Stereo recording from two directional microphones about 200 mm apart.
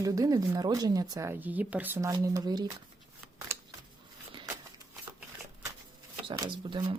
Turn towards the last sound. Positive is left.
turn(degrees=-20)  # may be behind; listen again after turning